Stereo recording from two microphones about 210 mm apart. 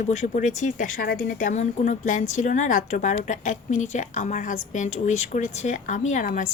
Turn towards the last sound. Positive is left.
turn(degrees=40)  # may be behind; listen again after turning